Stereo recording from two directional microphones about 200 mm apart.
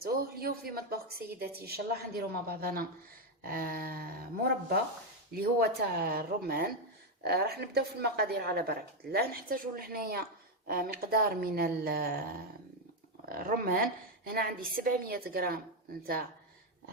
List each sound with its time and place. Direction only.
0.0 s speech: 50° right (ahead or behind)
5.3 s speech: 50° right (ahead or behind)